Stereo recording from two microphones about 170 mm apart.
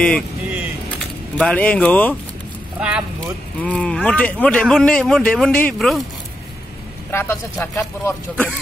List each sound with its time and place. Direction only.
1.3 s speech: 5° left (ahead or behind)
2.8 s speech: 5° right (ahead or behind)
3.2 s speech: 5° left (ahead or behind)
7.1 s speech: 15° left (ahead or behind)